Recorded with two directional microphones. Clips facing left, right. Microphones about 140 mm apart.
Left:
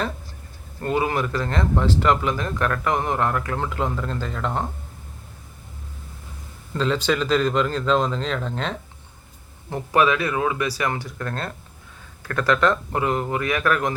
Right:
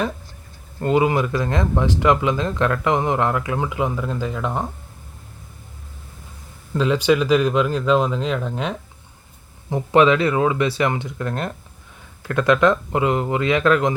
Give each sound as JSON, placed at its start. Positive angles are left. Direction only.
{"t": 0.8, "sound": "speech", "side_deg": -20}
{"t": 6.7, "sound": "speech", "side_deg": -10}